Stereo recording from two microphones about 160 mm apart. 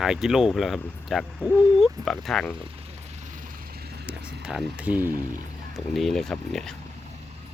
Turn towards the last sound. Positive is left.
turn(degrees=5)  # may be behind; listen again after turning